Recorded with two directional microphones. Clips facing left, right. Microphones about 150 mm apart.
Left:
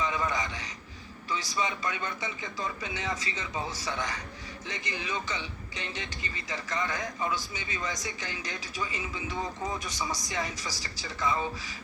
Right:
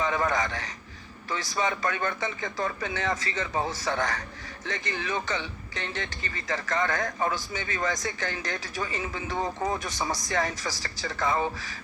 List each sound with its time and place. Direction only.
0.0 s a sound: 50° right (ahead or behind)
1.3 s speech: 55° right (ahead or behind)
4.6 s speech: 15° left (ahead or behind)
5.0 s speech: 50° right (ahead or behind)
6.0 s speech: 15° left (ahead or behind)
6.5 s speech: 50° right (ahead or behind)